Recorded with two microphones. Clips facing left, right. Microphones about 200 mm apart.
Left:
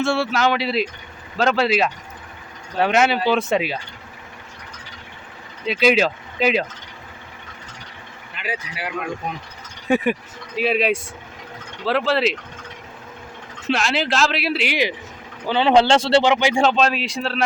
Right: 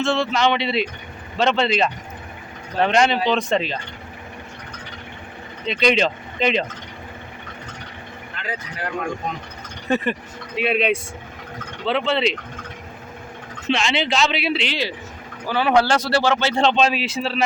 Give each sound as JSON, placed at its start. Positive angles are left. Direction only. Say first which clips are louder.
{"t": 0.0, "sound": "speech", "louder": "even", "side_deg": 10}
{"t": 5.6, "sound": "speech", "louder": "left 2 dB", "side_deg": 5}
{"t": 8.4, "sound": "speech", "louder": "left 1 dB", "side_deg": 10}
{"t": 9.9, "sound": "speech", "louder": "left 3 dB", "side_deg": 10}
{"t": 13.7, "sound": "speech", "louder": "even", "side_deg": 0}
{"t": 16.6, "sound": "speech", "louder": "even", "side_deg": 0}